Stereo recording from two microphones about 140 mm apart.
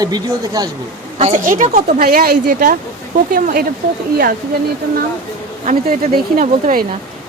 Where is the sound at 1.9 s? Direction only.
90° right.